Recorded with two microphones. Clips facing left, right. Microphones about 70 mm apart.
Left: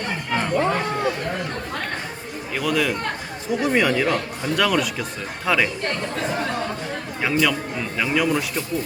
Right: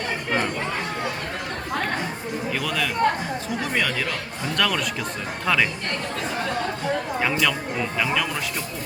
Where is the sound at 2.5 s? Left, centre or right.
Centre.